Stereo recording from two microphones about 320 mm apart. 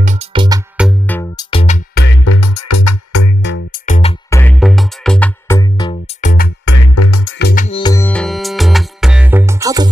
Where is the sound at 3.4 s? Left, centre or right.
Left.